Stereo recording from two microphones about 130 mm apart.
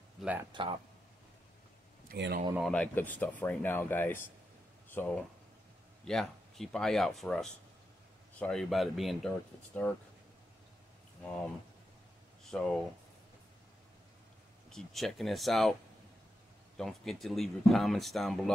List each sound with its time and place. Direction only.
0.2 s speech: 10° right (ahead or behind)
0.5 s speech: 40° right (ahead or behind)
2.1 s speech: 90° right
2.6 s speech: 10° left (ahead or behind)
12.4 s speech: 5° left (ahead or behind)
14.7 s speech: 5° left (ahead or behind)
16.7 s speech: centre (ahead or behind)